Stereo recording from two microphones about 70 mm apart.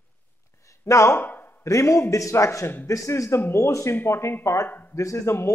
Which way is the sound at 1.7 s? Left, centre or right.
Left.